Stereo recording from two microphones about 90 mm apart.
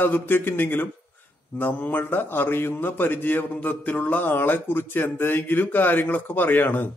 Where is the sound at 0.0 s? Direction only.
25° left (ahead or behind).